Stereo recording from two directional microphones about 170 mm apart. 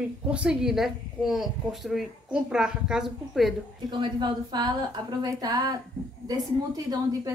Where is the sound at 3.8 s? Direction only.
25° right (ahead or behind).